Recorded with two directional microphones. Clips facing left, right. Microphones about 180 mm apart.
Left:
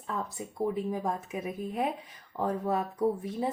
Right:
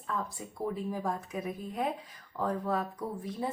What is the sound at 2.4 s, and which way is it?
Speech, 25° left (ahead or behind).